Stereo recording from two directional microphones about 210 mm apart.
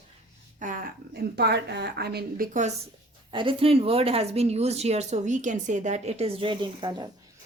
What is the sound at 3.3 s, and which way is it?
Speech, 25° right (ahead or behind).